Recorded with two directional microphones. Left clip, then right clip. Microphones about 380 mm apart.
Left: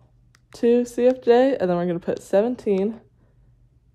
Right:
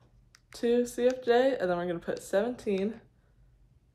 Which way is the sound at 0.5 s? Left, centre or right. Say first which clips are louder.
Left 8 dB; left.